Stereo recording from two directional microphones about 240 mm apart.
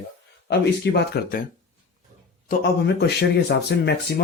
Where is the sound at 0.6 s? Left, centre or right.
Left.